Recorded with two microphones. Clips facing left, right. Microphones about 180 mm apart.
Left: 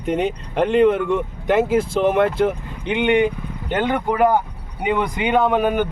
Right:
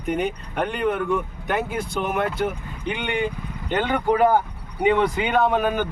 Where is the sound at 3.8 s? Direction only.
15° left (ahead or behind).